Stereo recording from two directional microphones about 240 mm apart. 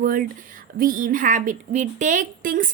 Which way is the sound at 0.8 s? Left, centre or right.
Right.